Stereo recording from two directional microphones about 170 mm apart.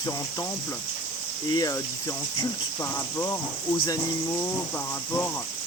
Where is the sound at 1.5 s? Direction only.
20° left (ahead or behind).